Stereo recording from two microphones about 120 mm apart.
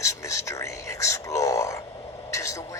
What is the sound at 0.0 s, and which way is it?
Whispering, 25° left (ahead or behind).